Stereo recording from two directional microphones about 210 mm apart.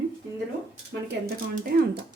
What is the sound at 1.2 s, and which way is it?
Speech, 50° right (ahead or behind).